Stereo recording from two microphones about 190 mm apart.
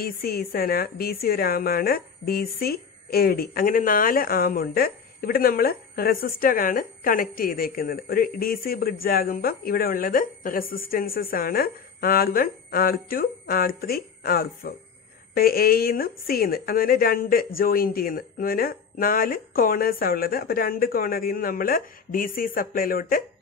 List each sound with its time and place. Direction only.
0.0 s a woman's voice: 50° left (ahead or behind)